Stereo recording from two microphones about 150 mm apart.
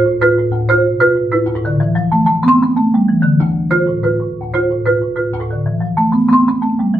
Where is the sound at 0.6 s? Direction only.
5° right (ahead or behind).